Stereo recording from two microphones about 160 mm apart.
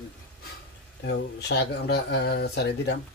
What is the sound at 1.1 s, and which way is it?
Speech, 90° left.